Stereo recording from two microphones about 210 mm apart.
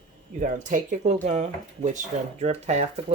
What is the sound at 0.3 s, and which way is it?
Speech, 35° right (ahead or behind).